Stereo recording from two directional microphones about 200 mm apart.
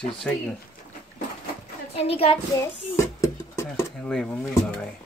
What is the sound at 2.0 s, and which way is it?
Speech, 30° left (ahead or behind).